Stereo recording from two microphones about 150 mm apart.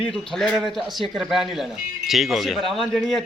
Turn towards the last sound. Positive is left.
turn(degrees=0)  # may be behind; listen again after turning